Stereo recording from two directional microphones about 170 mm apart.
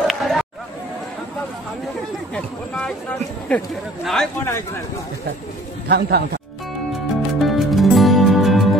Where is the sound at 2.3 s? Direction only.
5° left (ahead or behind).